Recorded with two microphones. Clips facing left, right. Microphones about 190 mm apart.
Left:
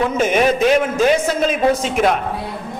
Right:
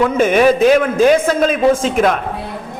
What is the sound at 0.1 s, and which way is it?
A man's voice, 55° right (ahead or behind).